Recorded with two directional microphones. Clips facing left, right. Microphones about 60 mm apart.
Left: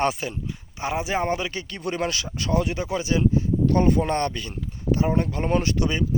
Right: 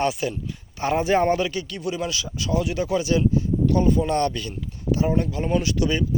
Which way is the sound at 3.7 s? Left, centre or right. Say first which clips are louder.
Left 1 dB; left.